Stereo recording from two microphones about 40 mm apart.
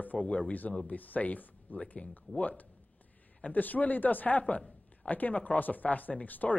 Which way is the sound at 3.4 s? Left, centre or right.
Left.